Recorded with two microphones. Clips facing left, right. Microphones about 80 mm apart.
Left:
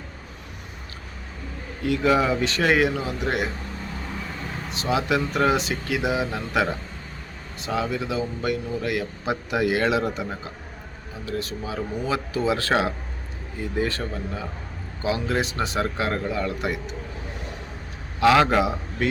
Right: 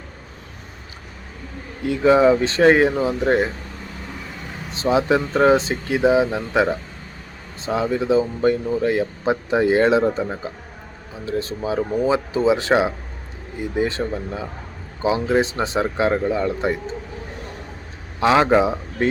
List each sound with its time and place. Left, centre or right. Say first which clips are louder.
1.9 s speech: right 6 dB; right
4.7 s speech: right 6 dB; right
11.3 s speech: right 6 dB; right
18.2 s speech: right 2 dB; right